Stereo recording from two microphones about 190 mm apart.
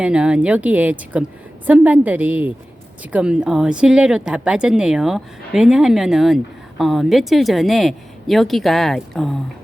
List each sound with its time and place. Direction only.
0.0 s speech: 5° right (ahead or behind)